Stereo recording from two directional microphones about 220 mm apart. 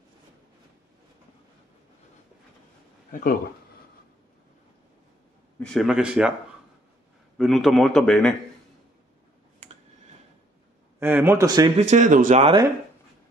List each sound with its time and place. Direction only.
5.6 s a man's voice: centre (ahead or behind)
7.3 s a man's voice: centre (ahead or behind)
11.0 s a man's voice: 10° right (ahead or behind)
11.9 s speech: 35° right (ahead or behind)
12.4 s speech: 25° right (ahead or behind)